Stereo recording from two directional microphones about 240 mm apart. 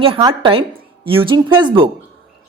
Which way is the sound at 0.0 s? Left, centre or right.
Centre.